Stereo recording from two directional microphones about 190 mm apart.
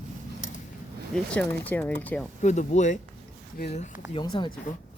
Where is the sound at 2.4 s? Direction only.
40° left (ahead or behind).